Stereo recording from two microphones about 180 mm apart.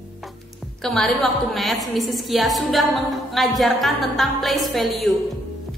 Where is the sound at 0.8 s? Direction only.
Centre (ahead or behind).